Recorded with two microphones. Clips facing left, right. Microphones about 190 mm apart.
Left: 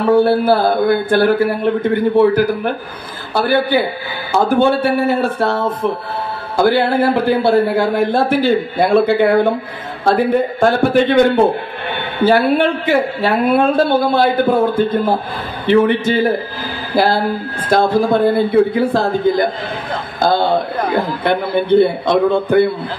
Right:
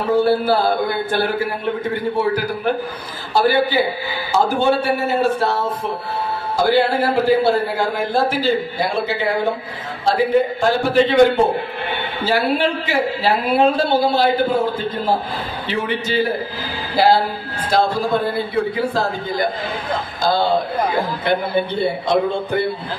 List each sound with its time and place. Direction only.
0.0 s a man's voice: 60° left (ahead or behind)